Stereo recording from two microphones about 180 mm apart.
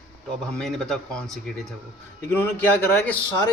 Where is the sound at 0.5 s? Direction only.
5° left (ahead or behind).